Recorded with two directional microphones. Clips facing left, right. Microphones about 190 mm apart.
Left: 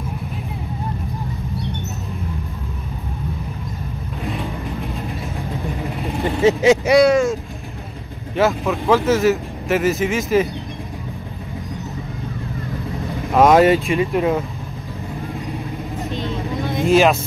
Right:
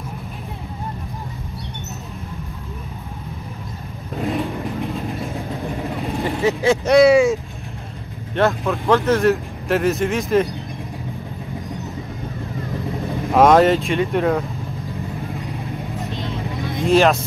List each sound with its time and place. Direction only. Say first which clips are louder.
6.4 s speech: left 5 dB; 20° left (ahead or behind)
6.9 s speech: right 6 dB; 5° right (ahead or behind)
8.4 s speech: left 1 dB; centre (ahead or behind)
13.3 s speech: left 1 dB; centre (ahead or behind)
16.8 s speech: even; 5° left (ahead or behind)